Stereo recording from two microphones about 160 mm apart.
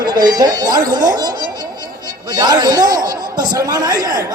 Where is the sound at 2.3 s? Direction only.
25° right (ahead or behind).